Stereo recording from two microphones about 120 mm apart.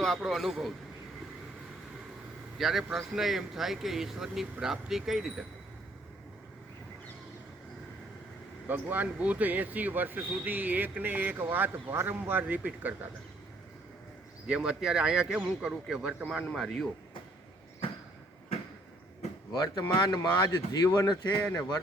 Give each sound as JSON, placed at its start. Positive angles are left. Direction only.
{"t": 0.0, "sound": "speech", "side_deg": 0}
{"t": 2.6, "sound": "speech", "side_deg": 0}
{"t": 8.6, "sound": "speech", "side_deg": -15}
{"t": 14.4, "sound": "speech", "side_deg": -5}
{"t": 20.1, "sound": "speech", "side_deg": 25}
{"t": 21.4, "sound": "speech", "side_deg": 15}